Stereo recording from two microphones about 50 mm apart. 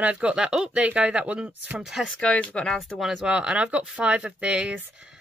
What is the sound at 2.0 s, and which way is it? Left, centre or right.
Speech, centre.